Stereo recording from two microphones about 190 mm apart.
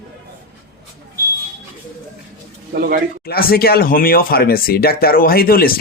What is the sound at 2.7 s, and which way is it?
Speech, 50° right (ahead or behind).